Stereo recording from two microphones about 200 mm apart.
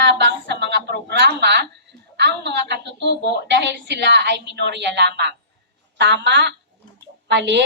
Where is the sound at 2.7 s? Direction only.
60° right (ahead or behind).